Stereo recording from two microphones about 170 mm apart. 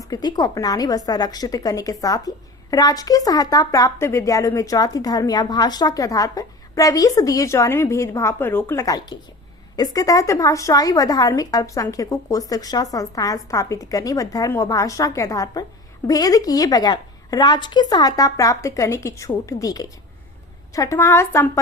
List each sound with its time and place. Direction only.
0.1 s a woman's voice: 25° left (ahead or behind)